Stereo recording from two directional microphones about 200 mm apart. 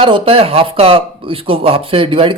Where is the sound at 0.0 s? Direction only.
25° right (ahead or behind).